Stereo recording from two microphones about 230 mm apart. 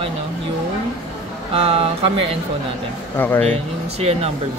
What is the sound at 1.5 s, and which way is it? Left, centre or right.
Speech, right.